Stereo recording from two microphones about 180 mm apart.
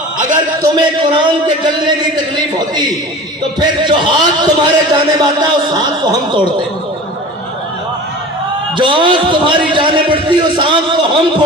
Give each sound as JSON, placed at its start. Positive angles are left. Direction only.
{"t": 0.3, "sound": "a man's voice", "side_deg": -25}
{"t": 8.8, "sound": "a man's voice", "side_deg": -25}